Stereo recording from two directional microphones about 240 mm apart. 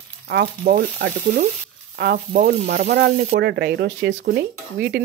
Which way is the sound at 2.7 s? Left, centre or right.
Right.